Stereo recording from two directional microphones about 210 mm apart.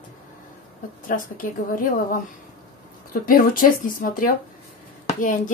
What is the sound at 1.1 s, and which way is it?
Speech, 40° left (ahead or behind).